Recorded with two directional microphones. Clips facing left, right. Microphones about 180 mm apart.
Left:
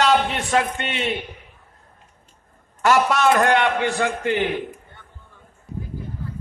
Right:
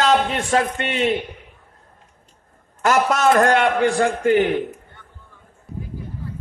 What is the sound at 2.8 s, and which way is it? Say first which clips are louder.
A man's voice: even; 45° right (ahead or behind).